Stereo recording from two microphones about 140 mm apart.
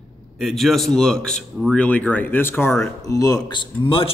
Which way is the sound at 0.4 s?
Centre (ahead or behind).